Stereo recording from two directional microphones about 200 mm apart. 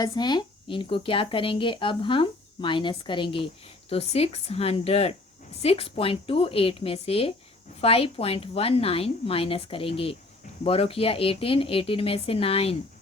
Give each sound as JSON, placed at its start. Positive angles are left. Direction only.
{"t": 0.0, "sound": "speech", "side_deg": 20}